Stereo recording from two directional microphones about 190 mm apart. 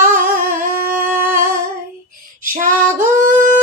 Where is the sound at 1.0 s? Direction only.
10° right (ahead or behind).